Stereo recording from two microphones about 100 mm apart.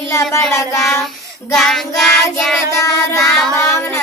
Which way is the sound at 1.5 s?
5° left (ahead or behind).